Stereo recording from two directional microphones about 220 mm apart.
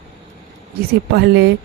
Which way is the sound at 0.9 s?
45° right (ahead or behind).